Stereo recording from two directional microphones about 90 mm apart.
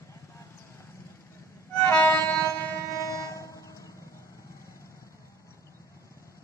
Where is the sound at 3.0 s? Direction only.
40° left (ahead or behind).